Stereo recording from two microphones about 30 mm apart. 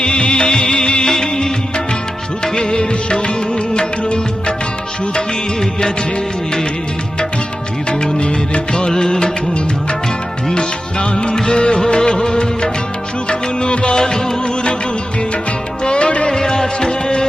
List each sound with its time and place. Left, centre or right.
0.0 s music: left
1.0 s music of bollywood: centre
2.4 s music: left
5.1 s music of bollywood: left
7.9 s music of bollywood: left
8.9 s music of bollywood: left
10.5 s music of bollywood: left
13.2 s music: left
13.9 s music: left
15.8 s music: left
16.4 s music: left